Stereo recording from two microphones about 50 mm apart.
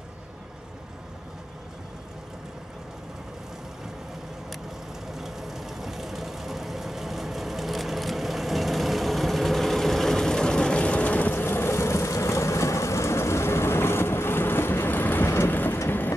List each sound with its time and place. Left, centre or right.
5.1 s vehicle: centre; by 11.4 s left
11.4 s vehicle: left
15.3 s rain: left
15.9 s vehicle: left